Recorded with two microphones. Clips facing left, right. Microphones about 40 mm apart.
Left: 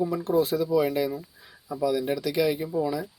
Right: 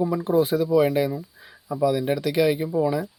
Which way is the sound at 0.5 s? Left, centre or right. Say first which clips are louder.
Right 4 dB; right.